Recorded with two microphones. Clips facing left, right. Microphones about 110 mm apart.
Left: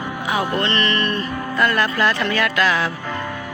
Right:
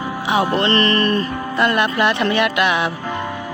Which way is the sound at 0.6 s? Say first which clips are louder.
Right 4 dB; 40° right (ahead or behind).